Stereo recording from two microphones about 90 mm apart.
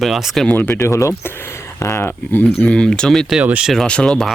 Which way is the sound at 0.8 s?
35° left (ahead or behind).